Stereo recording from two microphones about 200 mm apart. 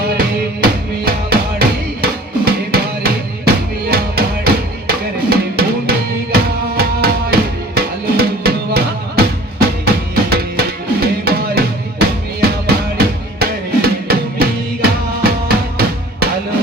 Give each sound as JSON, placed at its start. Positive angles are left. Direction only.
{"t": 1.0, "sound": "drum", "side_deg": -50}
{"t": 4.9, "sound": "music", "side_deg": -50}
{"t": 7.8, "sound": "drum", "side_deg": -50}